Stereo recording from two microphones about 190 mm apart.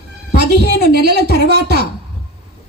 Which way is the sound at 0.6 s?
60° right (ahead or behind).